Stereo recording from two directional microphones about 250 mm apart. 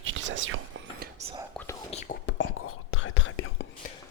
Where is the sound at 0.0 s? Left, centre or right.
Right.